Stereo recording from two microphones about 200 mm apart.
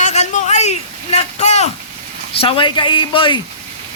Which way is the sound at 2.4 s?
25° left (ahead or behind).